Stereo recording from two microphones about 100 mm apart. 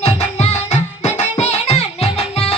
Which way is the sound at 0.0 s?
90° left.